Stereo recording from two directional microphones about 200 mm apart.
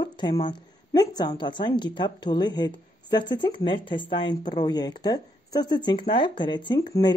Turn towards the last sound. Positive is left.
turn(degrees=20)  # may be behind; listen again after turning